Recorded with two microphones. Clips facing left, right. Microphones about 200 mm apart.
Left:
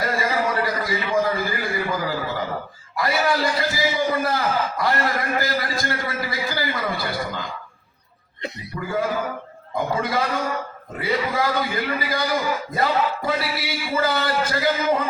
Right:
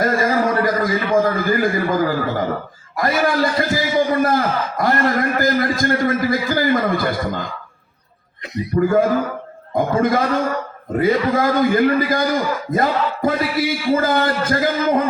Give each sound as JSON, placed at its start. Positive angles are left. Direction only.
{"t": 0.0, "sound": "a sound", "side_deg": -50}
{"t": 2.9, "sound": "a man's voice", "side_deg": -45}
{"t": 8.8, "sound": "a man's voice", "side_deg": -50}